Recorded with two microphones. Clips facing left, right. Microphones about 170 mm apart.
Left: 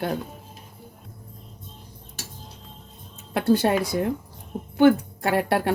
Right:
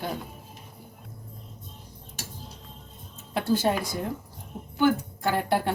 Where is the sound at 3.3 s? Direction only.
65° left (ahead or behind).